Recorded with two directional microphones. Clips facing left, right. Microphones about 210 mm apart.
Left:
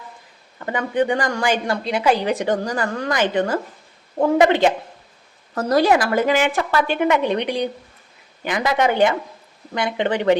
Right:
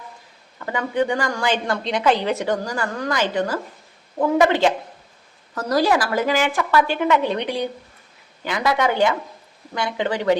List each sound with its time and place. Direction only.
0.6 s a woman's voice: 20° left (ahead or behind)